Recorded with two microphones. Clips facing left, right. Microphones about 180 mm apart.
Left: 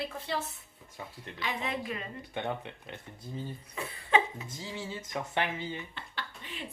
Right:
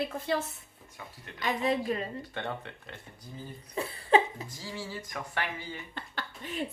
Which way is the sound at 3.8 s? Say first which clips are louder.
Right 4 dB; 35° right (ahead or behind).